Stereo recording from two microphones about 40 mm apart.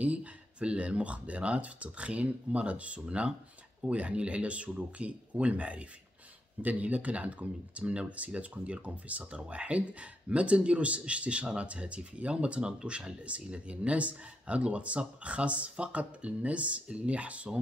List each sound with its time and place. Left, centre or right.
0.0 s speech: right